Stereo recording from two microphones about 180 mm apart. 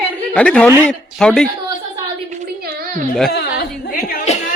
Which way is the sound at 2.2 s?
60° right (ahead or behind).